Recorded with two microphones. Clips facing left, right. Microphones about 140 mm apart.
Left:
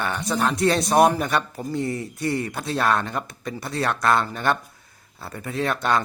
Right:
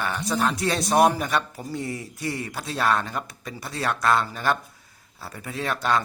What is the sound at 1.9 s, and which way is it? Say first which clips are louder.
Speech: left 4 dB; 55° left (ahead or behind).